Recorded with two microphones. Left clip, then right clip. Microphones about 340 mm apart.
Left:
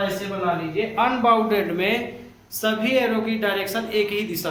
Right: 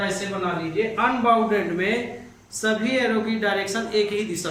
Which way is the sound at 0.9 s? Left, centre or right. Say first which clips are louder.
Left 2 dB; centre.